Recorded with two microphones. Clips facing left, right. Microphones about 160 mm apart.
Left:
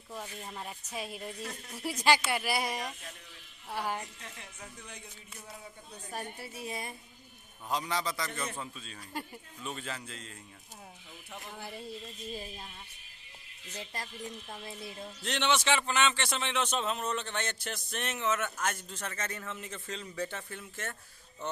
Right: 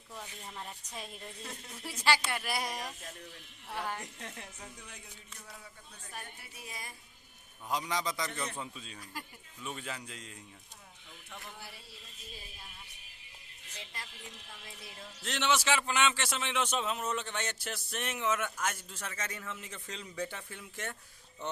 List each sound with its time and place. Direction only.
0.1 s speech: 20° left (ahead or behind)
2.3 s speech: 5° left (ahead or behind)
6.1 s a woman's voice: 35° left (ahead or behind)
7.7 s a man's voice: 15° right (ahead or behind)
8.3 s speech: 5° left (ahead or behind)
8.5 s a man's voice: 15° right (ahead or behind)
11.5 s speech: 50° left (ahead or behind)
13.7 s speech: 40° left (ahead or behind)
15.2 s a man's voice: 5° right (ahead or behind)